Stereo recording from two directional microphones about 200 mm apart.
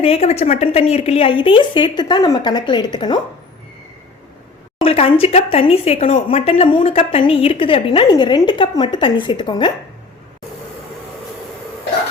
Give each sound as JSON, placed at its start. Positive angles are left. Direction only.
{"t": 0.0, "sound": "a woman's voice", "side_deg": 30}
{"t": 4.8, "sound": "a woman's voice", "side_deg": 30}